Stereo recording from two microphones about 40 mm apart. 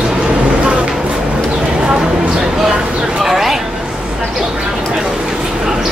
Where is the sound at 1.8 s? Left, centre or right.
Right.